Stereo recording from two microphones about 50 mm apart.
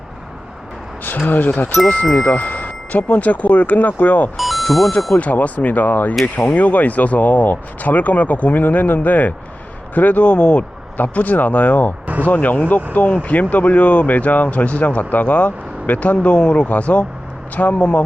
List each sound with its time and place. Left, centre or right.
1.3 s speech: left
4.4 s music: centre
5.1 s speech: left
12.0 s a sound: right
12.3 s speech: left